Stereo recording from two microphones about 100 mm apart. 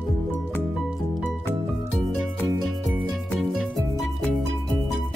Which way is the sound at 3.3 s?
5° left (ahead or behind).